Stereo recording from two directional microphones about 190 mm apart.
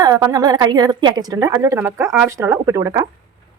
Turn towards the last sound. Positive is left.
turn(degrees=-15)  # may be behind; listen again after turning